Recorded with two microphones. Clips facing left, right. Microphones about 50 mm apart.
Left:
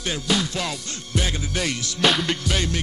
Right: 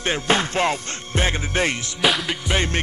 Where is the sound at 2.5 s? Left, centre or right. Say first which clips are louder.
Right 2 dB; right.